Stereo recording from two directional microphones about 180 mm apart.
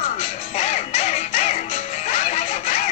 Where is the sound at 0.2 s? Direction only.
40° left (ahead or behind).